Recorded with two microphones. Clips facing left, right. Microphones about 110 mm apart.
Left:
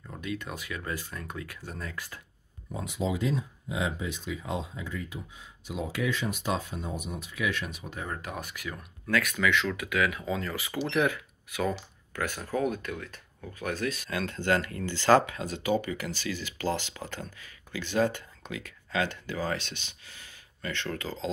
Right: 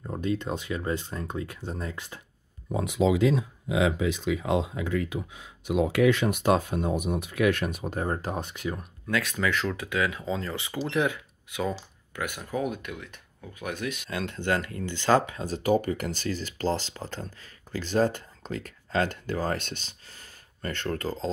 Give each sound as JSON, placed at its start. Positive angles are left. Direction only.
{"t": 0.0, "sound": "speech", "side_deg": -35}
{"t": 2.7, "sound": "speech", "side_deg": -70}
{"t": 15.4, "sound": "speech", "side_deg": -35}
{"t": 15.8, "sound": "speech", "side_deg": -50}
{"t": 17.0, "sound": "speech", "side_deg": -25}
{"t": 17.7, "sound": "speech", "side_deg": -40}